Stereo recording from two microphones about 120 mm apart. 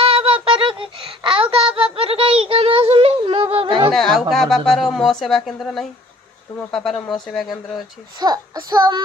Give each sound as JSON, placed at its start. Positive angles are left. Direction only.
{"t": 0.0, "sound": "a sound", "side_deg": -50}
{"t": 3.9, "sound": "speech", "side_deg": 5}
{"t": 8.2, "sound": "a child's voice", "side_deg": -35}